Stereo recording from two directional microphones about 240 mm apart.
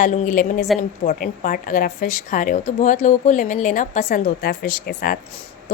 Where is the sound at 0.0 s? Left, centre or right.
Left.